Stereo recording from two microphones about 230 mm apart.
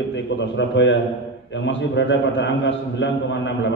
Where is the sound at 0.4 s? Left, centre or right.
Left.